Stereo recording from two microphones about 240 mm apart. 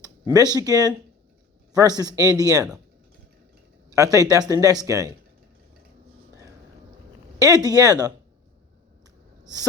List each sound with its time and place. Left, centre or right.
0.0 s speech: centre
3.8 s speech: centre
7.3 s speech: centre